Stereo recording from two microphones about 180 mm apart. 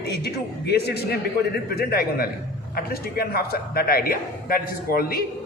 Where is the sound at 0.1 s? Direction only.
65° left (ahead or behind).